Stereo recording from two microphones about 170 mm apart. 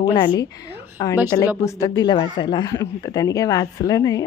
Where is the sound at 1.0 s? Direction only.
20° left (ahead or behind).